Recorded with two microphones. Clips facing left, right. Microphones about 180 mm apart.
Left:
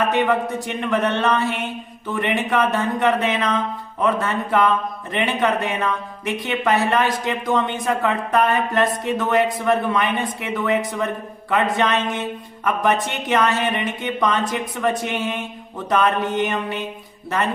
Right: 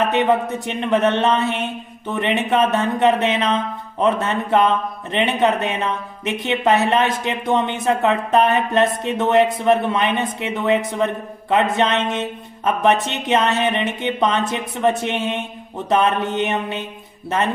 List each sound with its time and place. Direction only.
0.0 s speech: 20° right (ahead or behind)